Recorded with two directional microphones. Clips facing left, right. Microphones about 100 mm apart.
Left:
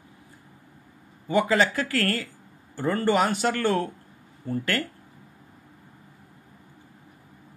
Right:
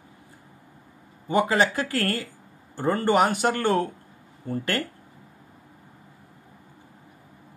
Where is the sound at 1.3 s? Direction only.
25° right (ahead or behind).